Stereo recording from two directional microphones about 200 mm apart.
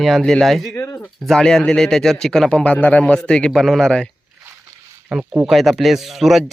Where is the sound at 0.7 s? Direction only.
15° left (ahead or behind).